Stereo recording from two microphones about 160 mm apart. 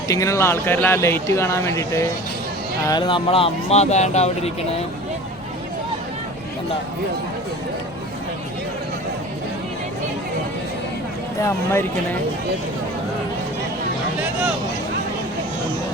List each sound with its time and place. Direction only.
0.1 s speech: 20° left (ahead or behind)
2.8 s speech: 30° left (ahead or behind)
11.4 s speech: 15° left (ahead or behind)